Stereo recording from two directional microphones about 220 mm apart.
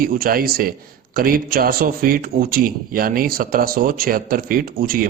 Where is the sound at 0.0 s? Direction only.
40° right (ahead or behind).